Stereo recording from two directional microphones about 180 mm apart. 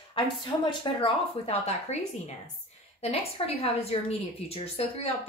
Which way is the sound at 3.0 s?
35° left (ahead or behind).